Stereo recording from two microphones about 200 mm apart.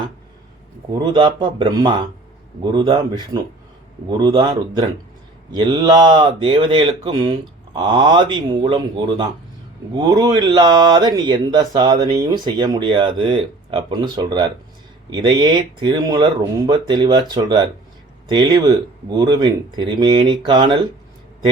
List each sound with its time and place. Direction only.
0.9 s speech: 20° right (ahead or behind)